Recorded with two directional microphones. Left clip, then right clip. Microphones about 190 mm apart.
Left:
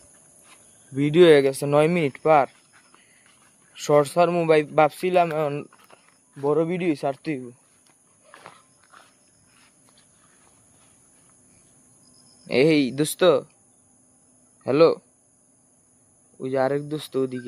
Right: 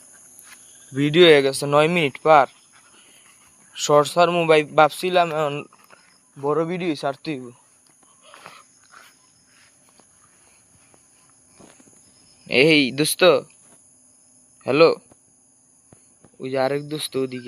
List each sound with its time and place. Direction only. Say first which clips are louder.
0.4 s a sound: right 6 dB; centre (ahead or behind)
1.1 s a man's voice: right 1 dB; 15° left (ahead or behind)
3.7 s a man's voice: right 2 dB; 15° left (ahead or behind)
5.7 s a sound: right 1 dB; centre (ahead or behind)
6.4 s speech: even; 20° left (ahead or behind)
8.2 s a sound: right 3 dB; 5° left (ahead or behind)
12.5 s speech: right 3 dB; 5° left (ahead or behind)
14.6 s speech: right 2 dB; centre (ahead or behind)
16.4 s speech: right 1 dB; centre (ahead or behind)